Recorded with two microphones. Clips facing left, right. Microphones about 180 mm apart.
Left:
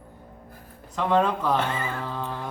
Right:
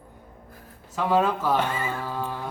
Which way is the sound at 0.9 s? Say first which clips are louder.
Even; 5° right (ahead or behind).